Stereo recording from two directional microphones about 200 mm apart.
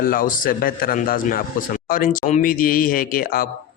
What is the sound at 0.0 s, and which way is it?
A man's voice, 45° left (ahead or behind).